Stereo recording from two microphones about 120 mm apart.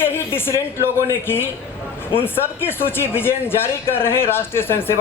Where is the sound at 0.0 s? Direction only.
20° left (ahead or behind).